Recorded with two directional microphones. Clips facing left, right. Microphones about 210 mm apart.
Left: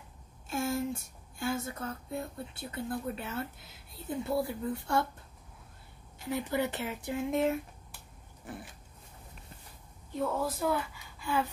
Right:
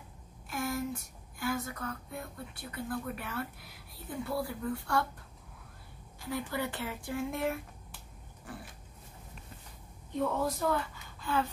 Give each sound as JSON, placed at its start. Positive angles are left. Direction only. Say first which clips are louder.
{"t": 0.5, "sound": "speech", "louder": "left 3 dB", "side_deg": 25}
{"t": 6.1, "sound": "speech", "louder": "left 4 dB", "side_deg": 20}
{"t": 10.1, "sound": "a woman's voice", "louder": "right 1 dB", "side_deg": 5}